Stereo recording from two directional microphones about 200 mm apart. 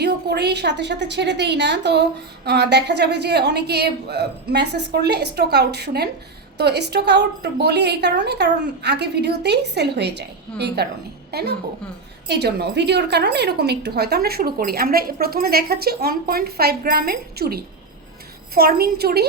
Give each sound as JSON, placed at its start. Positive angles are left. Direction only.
{"t": 0.0, "sound": "a woman's voice", "side_deg": -55}